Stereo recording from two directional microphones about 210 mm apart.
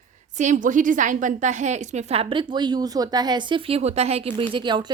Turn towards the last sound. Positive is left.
turn(degrees=-20)  # may be behind; listen again after turning